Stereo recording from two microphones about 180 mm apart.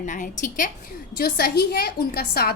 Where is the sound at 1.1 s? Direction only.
55° left (ahead or behind).